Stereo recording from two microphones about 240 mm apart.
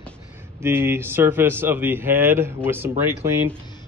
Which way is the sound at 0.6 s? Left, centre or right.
Centre.